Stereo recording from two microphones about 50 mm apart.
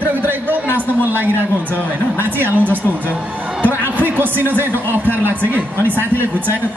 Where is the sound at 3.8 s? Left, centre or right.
Right.